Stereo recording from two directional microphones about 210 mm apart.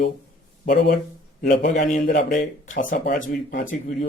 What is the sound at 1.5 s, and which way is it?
Speech, 35° left (ahead or behind).